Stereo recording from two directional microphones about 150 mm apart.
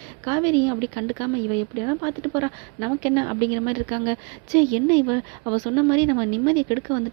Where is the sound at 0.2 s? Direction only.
25° right (ahead or behind).